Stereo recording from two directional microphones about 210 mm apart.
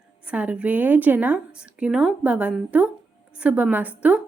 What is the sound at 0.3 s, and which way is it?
A woman's voice, 5° right (ahead or behind).